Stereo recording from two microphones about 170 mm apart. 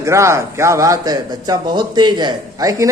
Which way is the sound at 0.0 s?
15° right (ahead or behind).